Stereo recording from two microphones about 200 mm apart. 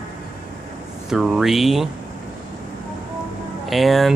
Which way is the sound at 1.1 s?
Centre (ahead or behind).